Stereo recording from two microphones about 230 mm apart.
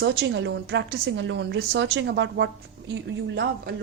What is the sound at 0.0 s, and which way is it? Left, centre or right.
A woman's voice, right.